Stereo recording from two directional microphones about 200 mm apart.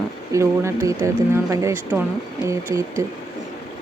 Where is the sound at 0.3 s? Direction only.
15° right (ahead or behind).